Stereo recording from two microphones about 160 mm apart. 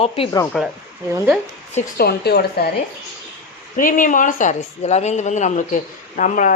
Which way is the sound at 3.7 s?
55° left (ahead or behind).